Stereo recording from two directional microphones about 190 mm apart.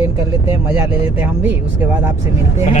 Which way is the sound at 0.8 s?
10° right (ahead or behind).